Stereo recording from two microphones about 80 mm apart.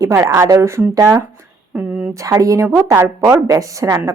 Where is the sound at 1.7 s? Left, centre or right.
Centre.